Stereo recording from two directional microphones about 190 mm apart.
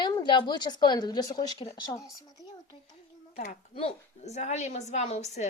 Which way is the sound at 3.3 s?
45° left (ahead or behind).